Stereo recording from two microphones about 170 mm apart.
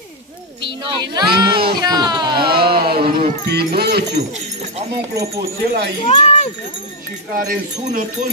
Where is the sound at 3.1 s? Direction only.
60° right (ahead or behind).